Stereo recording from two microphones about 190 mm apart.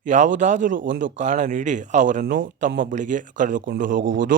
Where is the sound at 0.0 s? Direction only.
40° right (ahead or behind).